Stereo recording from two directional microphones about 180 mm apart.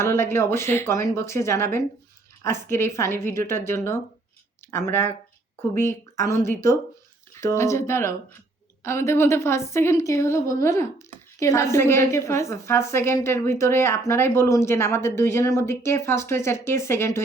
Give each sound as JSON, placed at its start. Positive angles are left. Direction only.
{"t": 0.0, "sound": "a woman's voice", "side_deg": 15}